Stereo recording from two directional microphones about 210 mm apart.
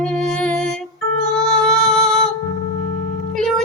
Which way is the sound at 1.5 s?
Centre (ahead or behind).